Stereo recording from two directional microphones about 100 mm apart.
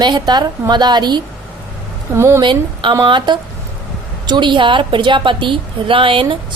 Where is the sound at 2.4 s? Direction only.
55° right (ahead or behind).